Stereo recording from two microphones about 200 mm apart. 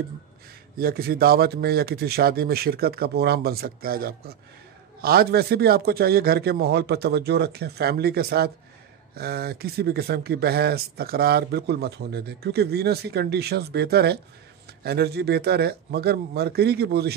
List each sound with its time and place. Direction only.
0.7 s speech: 50° right (ahead or behind)